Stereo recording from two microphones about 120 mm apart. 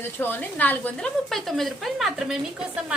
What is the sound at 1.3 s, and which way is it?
A woman's voice, centre (ahead or behind).